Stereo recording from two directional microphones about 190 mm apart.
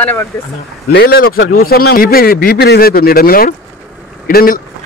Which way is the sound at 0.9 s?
55° left (ahead or behind).